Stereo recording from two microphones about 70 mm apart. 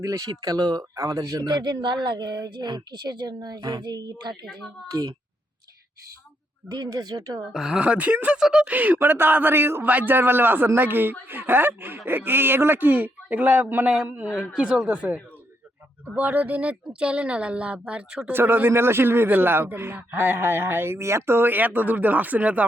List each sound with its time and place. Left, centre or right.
0.0 s speech: right
0.9 s a man's voice: right
4.9 s speech: right
6.7 s speech: right
7.5 s speech: centre
7.8 s a man's voice: centre
8.4 s a woman's voice: centre
8.6 s a man's voice: right
9.8 s a man's voice: right
18.3 s a man's voice: right